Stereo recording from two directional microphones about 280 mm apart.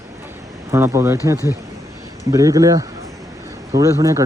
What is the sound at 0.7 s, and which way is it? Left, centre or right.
Speech, centre.